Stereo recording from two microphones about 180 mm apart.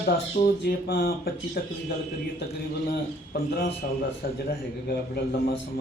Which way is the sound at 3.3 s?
55° left (ahead or behind).